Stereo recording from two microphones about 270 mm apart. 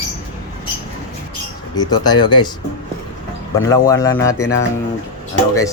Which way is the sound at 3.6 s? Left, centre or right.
Centre.